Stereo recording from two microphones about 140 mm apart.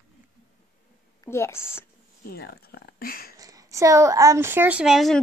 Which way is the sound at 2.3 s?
90° left.